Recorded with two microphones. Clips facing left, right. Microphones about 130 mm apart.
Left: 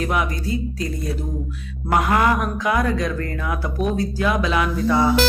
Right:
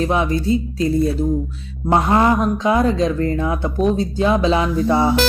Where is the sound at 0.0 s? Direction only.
25° right (ahead or behind).